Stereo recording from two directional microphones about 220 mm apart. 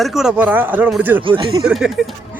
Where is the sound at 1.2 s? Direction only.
25° right (ahead or behind).